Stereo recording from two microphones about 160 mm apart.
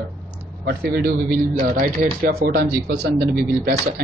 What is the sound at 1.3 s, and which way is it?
A man's voice, 60° right (ahead or behind).